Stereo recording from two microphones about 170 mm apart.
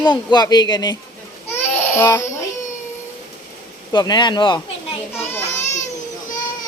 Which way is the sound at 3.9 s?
25° left (ahead or behind).